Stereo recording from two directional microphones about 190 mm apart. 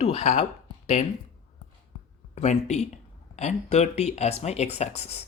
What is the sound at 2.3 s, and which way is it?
Speech, 35° left (ahead or behind).